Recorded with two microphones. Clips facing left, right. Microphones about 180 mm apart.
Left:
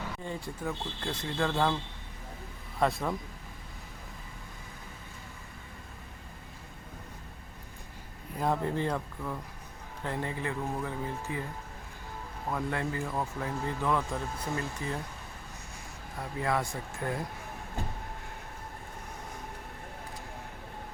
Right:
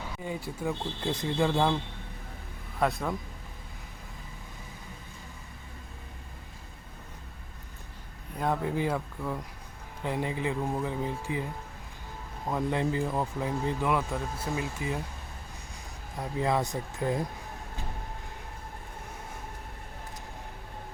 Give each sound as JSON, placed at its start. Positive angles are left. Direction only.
{"t": 0.2, "sound": "speech", "side_deg": -5}
{"t": 0.6, "sound": "speech", "side_deg": -15}
{"t": 2.7, "sound": "speech", "side_deg": 0}
{"t": 8.4, "sound": "speech", "side_deg": 0}
{"t": 12.5, "sound": "speech", "side_deg": -20}
{"t": 16.2, "sound": "speech", "side_deg": -20}